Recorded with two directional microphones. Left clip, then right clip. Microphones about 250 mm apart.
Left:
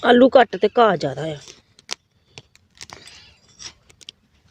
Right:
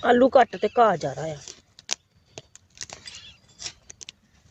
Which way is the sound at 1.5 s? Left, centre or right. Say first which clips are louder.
Even; centre.